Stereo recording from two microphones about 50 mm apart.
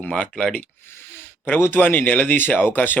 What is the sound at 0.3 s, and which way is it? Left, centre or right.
Speech, left.